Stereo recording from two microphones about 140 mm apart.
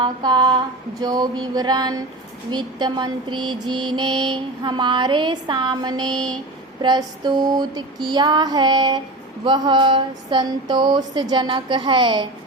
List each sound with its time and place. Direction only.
0.0 s mantra: 35° right (ahead or behind)
1.0 s a sound: 30° right (ahead or behind)
2.5 s mantra: 30° right (ahead or behind)